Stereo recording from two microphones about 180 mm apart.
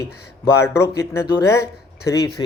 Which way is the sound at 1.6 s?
65° left (ahead or behind).